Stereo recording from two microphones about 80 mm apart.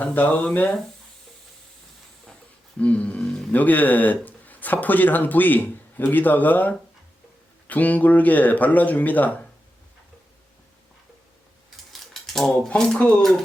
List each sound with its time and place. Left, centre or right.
0.0 s speech: left
2.7 s speech: centre
12.2 s speech: centre